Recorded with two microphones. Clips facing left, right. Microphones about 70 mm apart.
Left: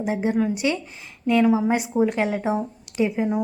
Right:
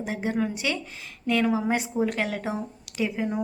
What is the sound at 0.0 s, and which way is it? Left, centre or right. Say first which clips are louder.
Speech: left 5 dB; left.